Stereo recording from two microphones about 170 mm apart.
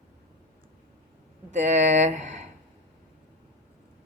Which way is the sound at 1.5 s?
40° right (ahead or behind).